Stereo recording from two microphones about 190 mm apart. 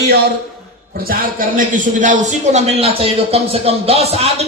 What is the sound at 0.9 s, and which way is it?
A man's voice, 50° right (ahead or behind).